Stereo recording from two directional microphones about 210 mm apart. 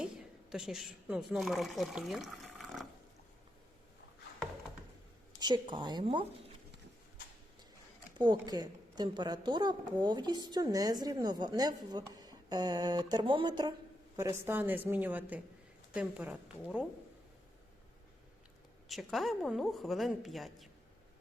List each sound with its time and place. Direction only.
0.0 s speech: 5° right (ahead or behind)
5.4 s a woman's voice: 20° right (ahead or behind)
8.2 s a woman's voice: 20° right (ahead or behind)
18.9 s a woman's voice: centre (ahead or behind)